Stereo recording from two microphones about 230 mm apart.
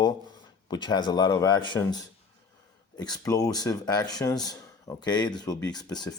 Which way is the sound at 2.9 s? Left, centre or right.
Centre.